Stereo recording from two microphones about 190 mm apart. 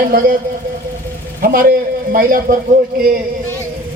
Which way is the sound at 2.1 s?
50° right (ahead or behind).